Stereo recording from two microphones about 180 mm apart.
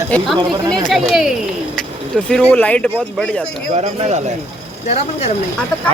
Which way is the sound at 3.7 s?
35° right (ahead or behind).